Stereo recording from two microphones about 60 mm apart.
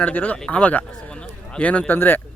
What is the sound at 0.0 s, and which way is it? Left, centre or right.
Speech, left.